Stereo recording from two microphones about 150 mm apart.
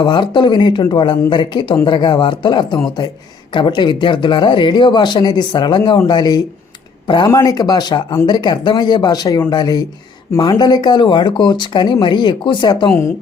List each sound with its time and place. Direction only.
0.0 s speech: 30° left (ahead or behind)